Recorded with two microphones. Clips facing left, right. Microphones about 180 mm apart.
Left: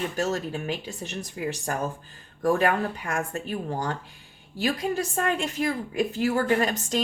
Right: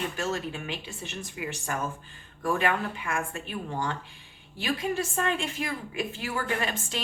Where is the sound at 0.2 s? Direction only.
40° left (ahead or behind).